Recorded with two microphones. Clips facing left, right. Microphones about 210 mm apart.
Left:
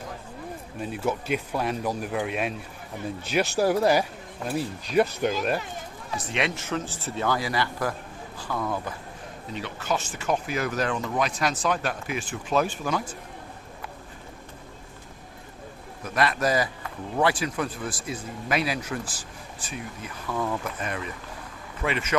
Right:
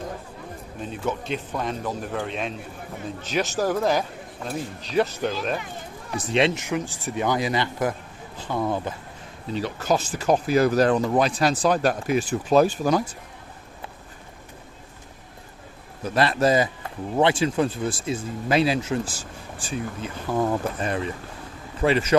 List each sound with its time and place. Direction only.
0.8 s speech: 10° left (ahead or behind)
6.5 s speech: 15° right (ahead or behind)
9.5 s speech: 35° right (ahead or behind)
16.0 s speech: 30° right (ahead or behind)